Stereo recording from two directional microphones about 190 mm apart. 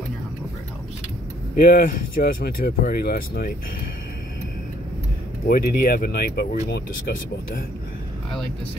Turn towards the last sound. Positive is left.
turn(degrees=50)  # may be behind; listen again after turning